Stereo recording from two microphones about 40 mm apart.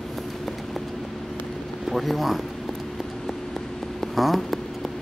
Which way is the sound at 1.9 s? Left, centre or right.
Centre.